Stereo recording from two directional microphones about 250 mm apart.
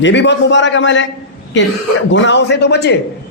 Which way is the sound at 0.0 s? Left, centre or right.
Left.